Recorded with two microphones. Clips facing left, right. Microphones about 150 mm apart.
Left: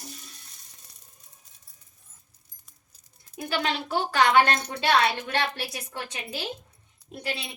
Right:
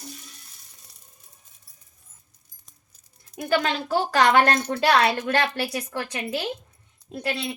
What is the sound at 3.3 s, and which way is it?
Speech, 50° right (ahead or behind).